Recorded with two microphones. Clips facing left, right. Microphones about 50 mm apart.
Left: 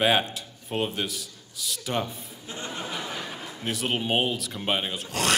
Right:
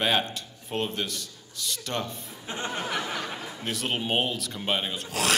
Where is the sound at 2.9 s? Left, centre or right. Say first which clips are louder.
Right 3 dB; right.